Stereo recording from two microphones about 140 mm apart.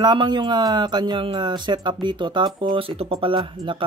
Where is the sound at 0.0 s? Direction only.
30° right (ahead or behind).